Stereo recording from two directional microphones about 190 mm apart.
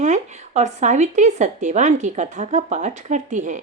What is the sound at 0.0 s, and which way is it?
Speech, 40° right (ahead or behind).